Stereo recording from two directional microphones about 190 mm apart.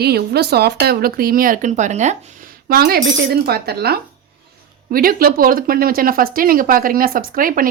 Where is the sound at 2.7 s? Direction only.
55° right (ahead or behind).